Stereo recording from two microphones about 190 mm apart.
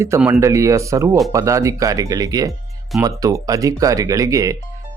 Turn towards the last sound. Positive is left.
turn(degrees=-15)  # may be behind; listen again after turning